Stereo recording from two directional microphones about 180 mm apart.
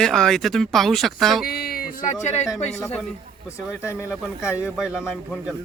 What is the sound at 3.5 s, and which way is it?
Speech, 15° left (ahead or behind).